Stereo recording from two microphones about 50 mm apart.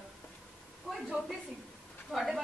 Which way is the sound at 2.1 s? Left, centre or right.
Centre.